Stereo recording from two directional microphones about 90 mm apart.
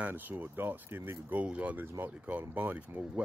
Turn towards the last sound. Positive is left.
turn(degrees=-15)  # may be behind; listen again after turning